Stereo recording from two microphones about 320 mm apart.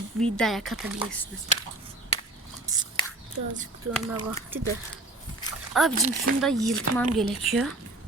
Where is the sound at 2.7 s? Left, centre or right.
Centre.